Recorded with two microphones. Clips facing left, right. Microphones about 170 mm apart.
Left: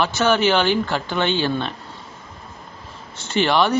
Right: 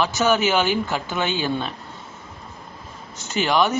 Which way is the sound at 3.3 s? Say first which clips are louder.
Left 2 dB; 5° right (ahead or behind).